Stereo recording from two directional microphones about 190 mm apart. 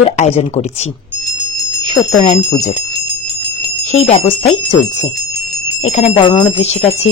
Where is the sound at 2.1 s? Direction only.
35° left (ahead or behind).